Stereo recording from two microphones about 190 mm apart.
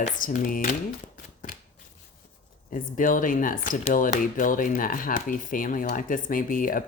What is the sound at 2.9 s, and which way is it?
Speech, 45° left (ahead or behind).